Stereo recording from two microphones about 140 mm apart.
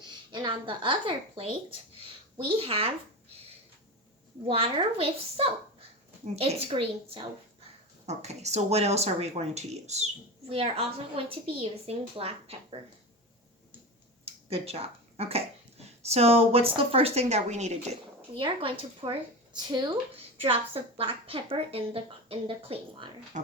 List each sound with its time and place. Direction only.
0.3 s a woman's voice: 35° right (ahead or behind)
2.6 s speech: 45° right (ahead or behind)
4.4 s speech: 40° right (ahead or behind)
8.0 s speech: 50° right (ahead or behind)
14.3 s speech: 45° right (ahead or behind)
18.3 s speech: 40° right (ahead or behind)
20.1 s speech: 45° right (ahead or behind)